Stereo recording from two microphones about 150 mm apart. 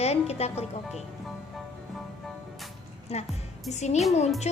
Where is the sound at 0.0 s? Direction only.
45° left (ahead or behind).